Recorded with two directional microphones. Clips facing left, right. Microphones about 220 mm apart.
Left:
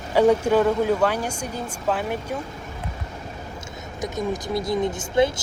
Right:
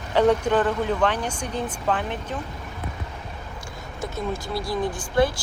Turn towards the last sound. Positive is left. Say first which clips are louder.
# left 1 dB
turn(degrees=20)  # may be behind; listen again after turning